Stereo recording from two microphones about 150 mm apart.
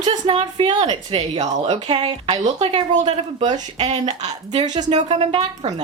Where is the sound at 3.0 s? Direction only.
35° right (ahead or behind).